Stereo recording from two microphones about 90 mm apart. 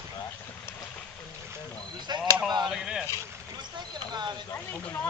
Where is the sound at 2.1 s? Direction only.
50° right (ahead or behind).